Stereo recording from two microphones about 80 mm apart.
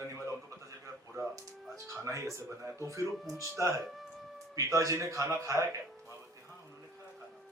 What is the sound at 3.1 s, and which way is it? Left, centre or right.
Speech, centre.